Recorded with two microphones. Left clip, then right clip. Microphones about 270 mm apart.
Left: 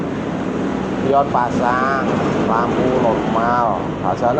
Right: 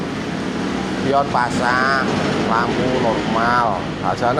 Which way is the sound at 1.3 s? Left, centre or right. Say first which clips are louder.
Left 1 dB; right.